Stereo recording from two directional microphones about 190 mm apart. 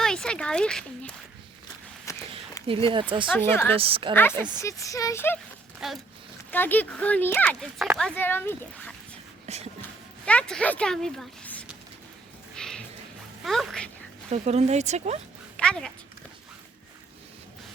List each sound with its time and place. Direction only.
0.0 s speech: 5° left (ahead or behind)
2.1 s a sound: 15° left (ahead or behind)
2.6 s speech: 30° right (ahead or behind)
3.3 s speech: 10° left (ahead or behind)
3.8 s speech: 30° right (ahead or behind)
4.1 s speech: 10° left (ahead or behind)
5.8 s speech: centre (ahead or behind)
9.5 s speech: 35° right (ahead or behind)
10.2 s speech: 5° left (ahead or behind)
12.5 s a sound: 5° left (ahead or behind)
13.4 s speech: centre (ahead or behind)
14.3 s speech: 35° right (ahead or behind)
15.5 s speech: 5° left (ahead or behind)